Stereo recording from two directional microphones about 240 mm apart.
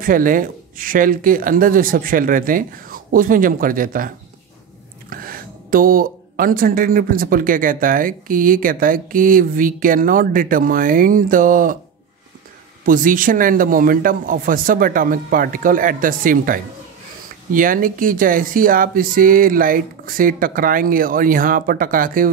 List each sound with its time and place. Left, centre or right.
0.0 s speech: right
5.1 s speech: right
12.8 s speech: right